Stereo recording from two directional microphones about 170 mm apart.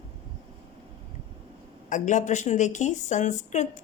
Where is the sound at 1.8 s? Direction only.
45° left (ahead or behind).